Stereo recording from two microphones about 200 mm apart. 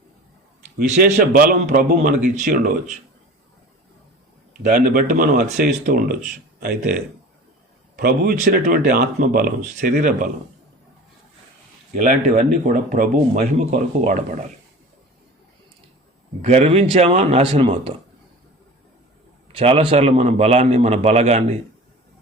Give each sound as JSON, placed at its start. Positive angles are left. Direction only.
{"t": 0.8, "sound": "speech", "side_deg": -40}
{"t": 4.6, "sound": "speech", "side_deg": -40}
{"t": 11.9, "sound": "speech", "side_deg": -35}
{"t": 16.4, "sound": "speech", "side_deg": -35}
{"t": 19.5, "sound": "speech", "side_deg": -30}